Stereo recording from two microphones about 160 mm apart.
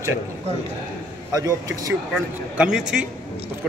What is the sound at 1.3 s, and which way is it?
Speech, 20° right (ahead or behind).